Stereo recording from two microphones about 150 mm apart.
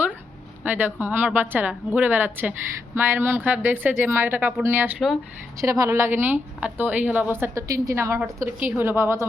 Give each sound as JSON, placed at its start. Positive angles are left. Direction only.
{"t": 0.6, "sound": "a woman's voice", "side_deg": -10}